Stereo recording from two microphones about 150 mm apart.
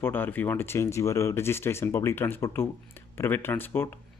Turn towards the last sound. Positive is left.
turn(degrees=15)  # may be behind; listen again after turning